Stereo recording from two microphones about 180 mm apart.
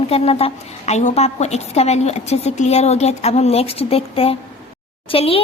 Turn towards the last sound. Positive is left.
turn(degrees=30)  # may be behind; listen again after turning